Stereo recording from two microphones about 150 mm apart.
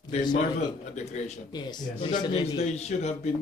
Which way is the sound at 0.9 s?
45° left (ahead or behind).